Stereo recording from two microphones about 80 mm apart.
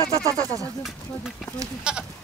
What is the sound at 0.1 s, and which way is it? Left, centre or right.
Speech, right.